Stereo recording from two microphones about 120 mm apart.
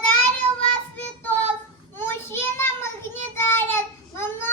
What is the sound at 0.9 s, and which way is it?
Child singing, 15° left (ahead or behind).